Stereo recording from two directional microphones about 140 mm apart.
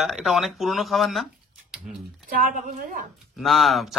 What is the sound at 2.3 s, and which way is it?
Speech, 70° right (ahead or behind).